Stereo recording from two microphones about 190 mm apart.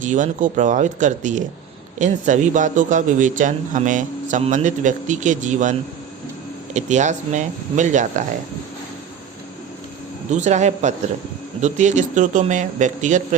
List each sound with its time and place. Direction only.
0.0 s a man's voice: 40° right (ahead or behind)
6.7 s a man's voice: 40° right (ahead or behind)
10.2 s a man's voice: 40° right (ahead or behind)